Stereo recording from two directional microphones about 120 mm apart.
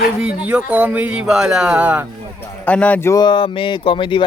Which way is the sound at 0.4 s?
15° right (ahead or behind).